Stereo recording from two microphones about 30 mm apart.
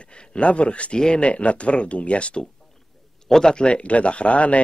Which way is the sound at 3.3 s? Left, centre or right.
Left.